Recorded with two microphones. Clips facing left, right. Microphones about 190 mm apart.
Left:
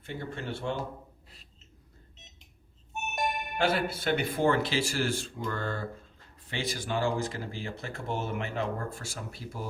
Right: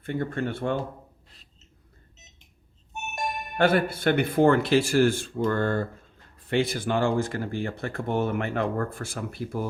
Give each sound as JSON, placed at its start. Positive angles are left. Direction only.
{"t": 0.0, "sound": "speech", "side_deg": -55}
{"t": 2.9, "sound": "music", "side_deg": 0}
{"t": 3.6, "sound": "speech", "side_deg": -55}